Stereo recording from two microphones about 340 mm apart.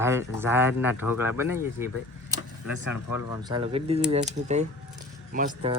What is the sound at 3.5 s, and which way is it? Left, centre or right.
Speech, centre.